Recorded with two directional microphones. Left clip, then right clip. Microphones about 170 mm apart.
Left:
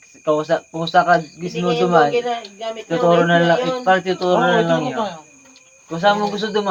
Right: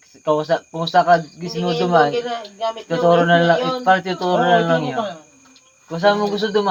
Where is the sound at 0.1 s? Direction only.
35° right (ahead or behind).